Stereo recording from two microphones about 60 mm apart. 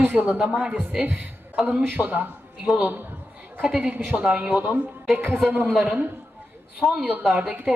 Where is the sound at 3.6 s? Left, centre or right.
Centre.